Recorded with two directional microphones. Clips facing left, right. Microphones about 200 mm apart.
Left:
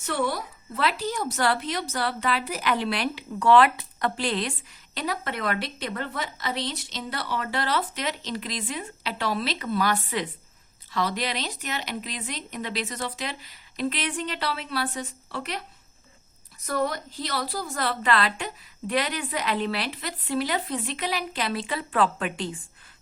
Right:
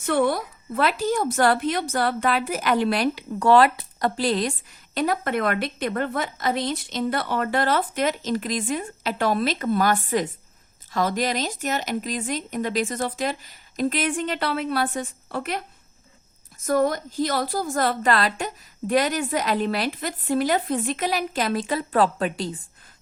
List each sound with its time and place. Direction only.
0.0 s a woman's voice: 55° right (ahead or behind)
4.9 s a woman's voice: 50° right (ahead or behind)